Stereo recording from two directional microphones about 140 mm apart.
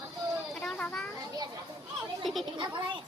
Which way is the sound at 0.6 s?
5° left (ahead or behind).